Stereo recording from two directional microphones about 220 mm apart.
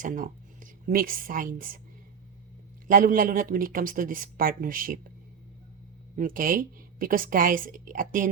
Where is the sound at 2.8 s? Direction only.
40° right (ahead or behind).